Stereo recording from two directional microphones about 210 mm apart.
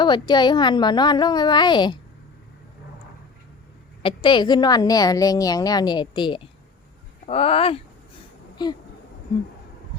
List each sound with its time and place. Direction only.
0.0 s a woman's voice: 20° left (ahead or behind)
4.0 s a woman's voice: 25° left (ahead or behind)